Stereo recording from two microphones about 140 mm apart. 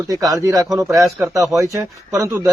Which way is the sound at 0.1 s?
25° right (ahead or behind).